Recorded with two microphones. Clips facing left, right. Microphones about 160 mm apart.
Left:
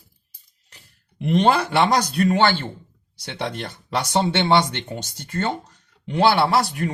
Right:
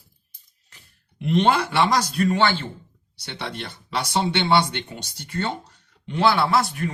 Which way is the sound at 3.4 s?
50° left (ahead or behind).